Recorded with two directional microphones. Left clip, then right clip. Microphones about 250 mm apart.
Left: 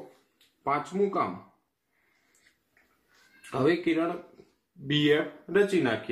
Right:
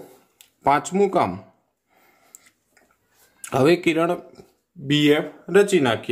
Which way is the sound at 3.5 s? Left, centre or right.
Right.